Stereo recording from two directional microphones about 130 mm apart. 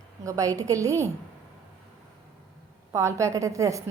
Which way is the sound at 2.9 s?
25° right (ahead or behind).